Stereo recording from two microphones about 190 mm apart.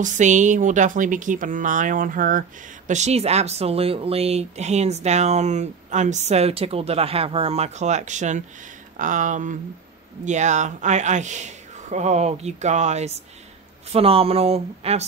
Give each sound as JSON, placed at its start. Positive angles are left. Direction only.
{"t": 0.0, "sound": "speech", "side_deg": -40}